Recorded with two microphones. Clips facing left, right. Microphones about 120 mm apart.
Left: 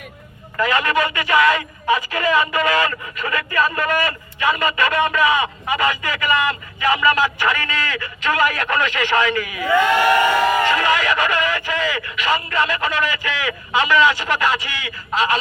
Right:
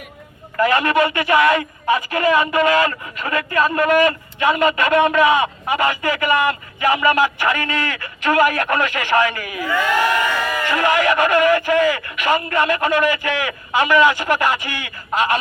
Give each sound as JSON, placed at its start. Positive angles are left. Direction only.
{"t": 0.6, "sound": "speech", "side_deg": -50}
{"t": 10.7, "sound": "speech", "side_deg": -50}